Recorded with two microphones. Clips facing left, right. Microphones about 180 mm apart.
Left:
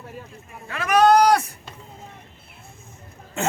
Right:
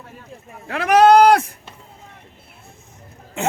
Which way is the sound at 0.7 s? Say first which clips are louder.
Right 4 dB; 70° right (ahead or behind).